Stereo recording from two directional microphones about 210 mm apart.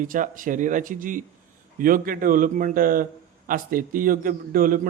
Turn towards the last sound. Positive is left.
turn(degrees=-40)  # may be behind; listen again after turning